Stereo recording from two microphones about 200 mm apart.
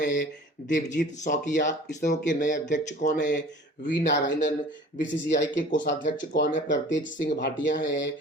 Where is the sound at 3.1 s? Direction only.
60° left (ahead or behind).